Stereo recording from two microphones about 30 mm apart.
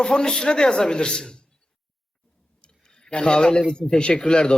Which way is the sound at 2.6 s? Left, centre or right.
Left.